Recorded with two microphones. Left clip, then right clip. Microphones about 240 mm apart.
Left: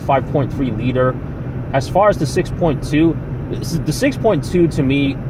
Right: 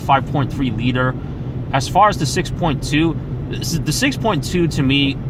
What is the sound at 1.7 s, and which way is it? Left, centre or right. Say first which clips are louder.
Speech: even; right.